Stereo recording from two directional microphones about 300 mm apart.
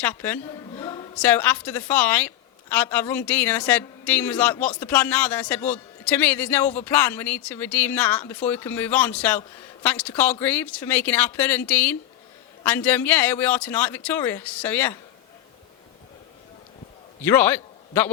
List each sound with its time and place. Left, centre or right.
0.0 s a woman's voice: centre
0.8 s a sound: centre
1.2 s a man's voice: centre
17.2 s a man's voice: centre